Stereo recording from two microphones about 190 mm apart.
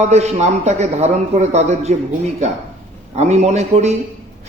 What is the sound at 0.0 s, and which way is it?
A man's voice, 35° right (ahead or behind).